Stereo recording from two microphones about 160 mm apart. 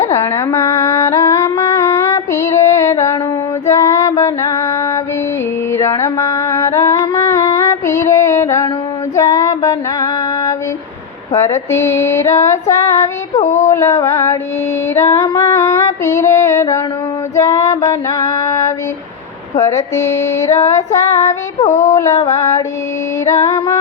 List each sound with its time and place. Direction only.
0.1 s a sound: 15° left (ahead or behind)
3.7 s music: 20° left (ahead or behind)
5.7 s mantra: 20° left (ahead or behind)
7.6 s music: 20° left (ahead or behind)
9.1 s female singing: 20° left (ahead or behind)
13.4 s a sound: 50° left (ahead or behind)
13.7 s female singing: 20° left (ahead or behind)
21.6 s a sound: 50° left (ahead or behind)
21.8 s female singing: 20° left (ahead or behind)